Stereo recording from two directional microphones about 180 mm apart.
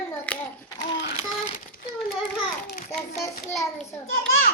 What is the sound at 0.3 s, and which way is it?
Hands, 10° left (ahead or behind).